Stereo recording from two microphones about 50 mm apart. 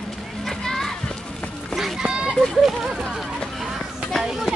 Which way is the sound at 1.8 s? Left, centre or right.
Centre.